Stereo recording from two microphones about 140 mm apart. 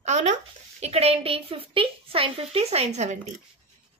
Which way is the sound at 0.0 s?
55° right (ahead or behind).